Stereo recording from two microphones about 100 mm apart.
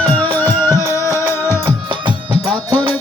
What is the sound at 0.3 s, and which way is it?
Music, 20° left (ahead or behind).